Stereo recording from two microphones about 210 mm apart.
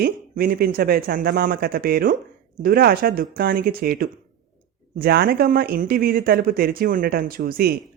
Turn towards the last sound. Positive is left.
turn(degrees=-45)  # may be behind; listen again after turning